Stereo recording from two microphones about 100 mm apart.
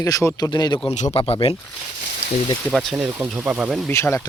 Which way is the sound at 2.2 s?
85° left.